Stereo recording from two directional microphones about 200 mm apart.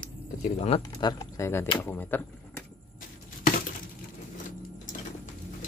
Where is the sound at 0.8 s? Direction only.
20° left (ahead or behind).